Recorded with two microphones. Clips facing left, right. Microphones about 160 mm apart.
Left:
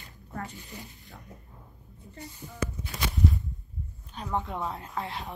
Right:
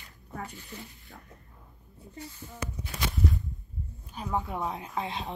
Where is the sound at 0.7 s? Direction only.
15° left (ahead or behind).